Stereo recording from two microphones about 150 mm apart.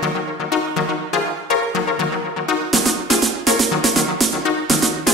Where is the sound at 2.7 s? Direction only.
Centre (ahead or behind).